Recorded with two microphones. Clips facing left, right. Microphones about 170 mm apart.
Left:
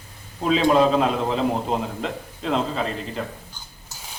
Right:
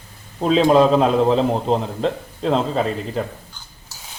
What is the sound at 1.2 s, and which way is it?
Speech, 35° right (ahead or behind).